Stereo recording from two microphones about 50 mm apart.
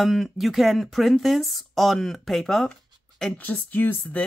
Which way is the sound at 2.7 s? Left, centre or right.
Centre.